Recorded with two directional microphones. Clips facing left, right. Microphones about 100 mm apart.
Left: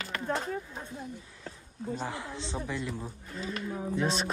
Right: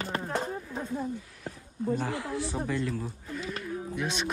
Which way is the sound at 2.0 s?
20° left (ahead or behind).